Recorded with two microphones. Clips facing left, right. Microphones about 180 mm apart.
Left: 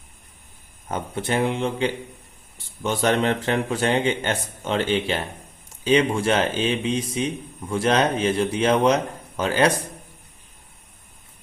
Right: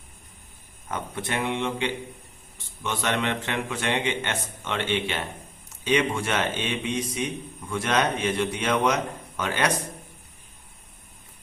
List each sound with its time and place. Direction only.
0.9 s a man's voice: 30° left (ahead or behind)